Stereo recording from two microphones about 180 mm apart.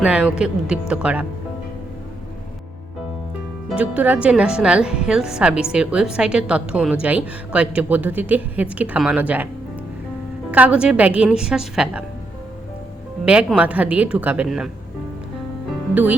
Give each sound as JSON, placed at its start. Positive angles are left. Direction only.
{"t": 0.0, "sound": "speech", "side_deg": -5}
{"t": 3.7, "sound": "a woman's voice", "side_deg": -10}
{"t": 10.5, "sound": "speech", "side_deg": -5}
{"t": 13.2, "sound": "a woman's voice", "side_deg": -5}